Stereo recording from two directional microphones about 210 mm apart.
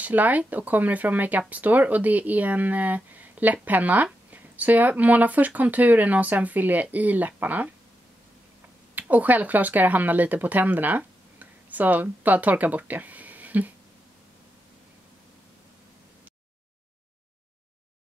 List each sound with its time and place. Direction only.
0.0 s speech: 10° right (ahead or behind)
8.9 s speech: 10° right (ahead or behind)